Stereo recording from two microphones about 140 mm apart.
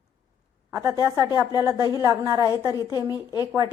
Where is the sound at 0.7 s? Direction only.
25° right (ahead or behind).